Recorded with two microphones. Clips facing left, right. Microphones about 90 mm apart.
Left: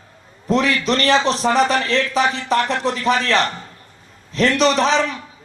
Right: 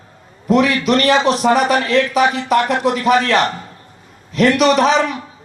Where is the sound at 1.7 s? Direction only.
30° left (ahead or behind).